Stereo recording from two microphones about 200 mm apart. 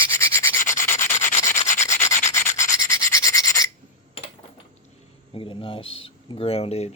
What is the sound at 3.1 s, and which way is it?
Rub, 15° left (ahead or behind).